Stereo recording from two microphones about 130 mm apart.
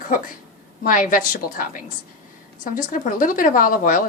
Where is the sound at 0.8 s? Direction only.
90° left.